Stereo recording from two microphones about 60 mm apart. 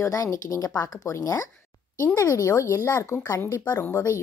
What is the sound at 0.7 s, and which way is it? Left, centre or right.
Speech, left.